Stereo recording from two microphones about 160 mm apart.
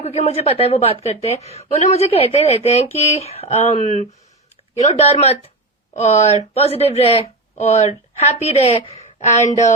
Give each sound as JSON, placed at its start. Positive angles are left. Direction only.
{"t": 0.0, "sound": "a woman's voice", "side_deg": 40}